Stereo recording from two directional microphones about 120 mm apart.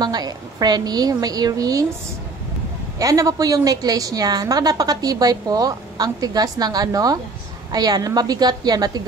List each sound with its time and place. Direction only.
0.0 s a woman's voice: 35° right (ahead or behind)
3.0 s a woman's voice: 30° right (ahead or behind)